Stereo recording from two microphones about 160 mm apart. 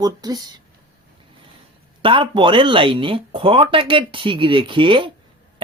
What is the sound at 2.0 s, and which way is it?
Speech, 30° right (ahead or behind).